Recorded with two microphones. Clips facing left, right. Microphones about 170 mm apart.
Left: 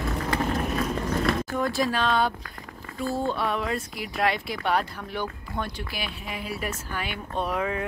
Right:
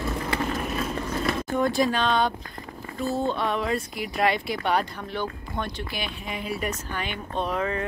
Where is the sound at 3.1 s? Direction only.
5° left (ahead or behind).